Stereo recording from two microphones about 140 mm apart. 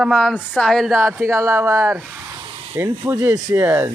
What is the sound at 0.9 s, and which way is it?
Speech, 20° right (ahead or behind).